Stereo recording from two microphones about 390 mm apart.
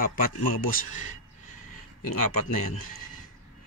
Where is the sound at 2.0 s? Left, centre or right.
Left.